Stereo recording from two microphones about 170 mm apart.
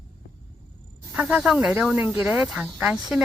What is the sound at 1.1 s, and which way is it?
Speech, 5° right (ahead or behind).